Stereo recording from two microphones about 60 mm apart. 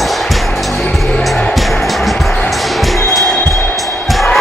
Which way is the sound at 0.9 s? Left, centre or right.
Centre.